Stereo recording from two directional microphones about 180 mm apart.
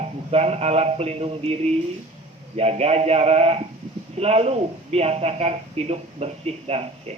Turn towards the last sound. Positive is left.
turn(degrees=-35)  # may be behind; listen again after turning